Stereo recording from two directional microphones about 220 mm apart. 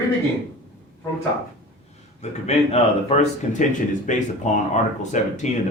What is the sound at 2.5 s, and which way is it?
Speech, 30° left (ahead or behind).